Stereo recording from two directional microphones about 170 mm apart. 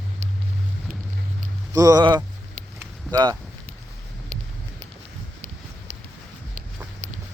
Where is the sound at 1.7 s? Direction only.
20° right (ahead or behind).